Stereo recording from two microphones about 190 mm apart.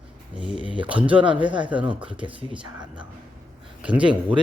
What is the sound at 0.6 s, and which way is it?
Speech, 5° right (ahead or behind).